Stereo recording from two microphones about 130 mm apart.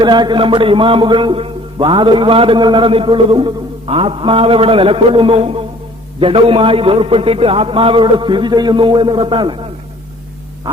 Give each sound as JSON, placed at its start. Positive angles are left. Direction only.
{"t": 0.0, "sound": "a man's voice", "side_deg": -35}